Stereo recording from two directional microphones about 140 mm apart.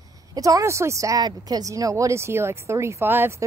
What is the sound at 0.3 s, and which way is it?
A woman's voice, 25° right (ahead or behind).